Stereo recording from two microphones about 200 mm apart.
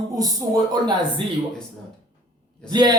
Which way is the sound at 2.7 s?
20° right (ahead or behind).